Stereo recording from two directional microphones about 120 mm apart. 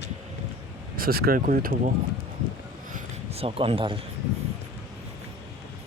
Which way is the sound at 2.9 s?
60° right (ahead or behind).